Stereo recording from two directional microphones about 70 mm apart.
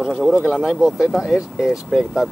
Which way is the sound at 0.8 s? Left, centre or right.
Centre.